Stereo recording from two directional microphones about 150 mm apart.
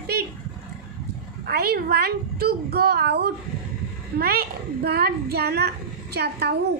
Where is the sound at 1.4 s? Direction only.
90° right.